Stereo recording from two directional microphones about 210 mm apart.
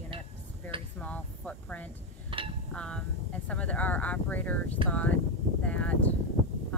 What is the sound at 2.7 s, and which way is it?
Speech, 5° left (ahead or behind).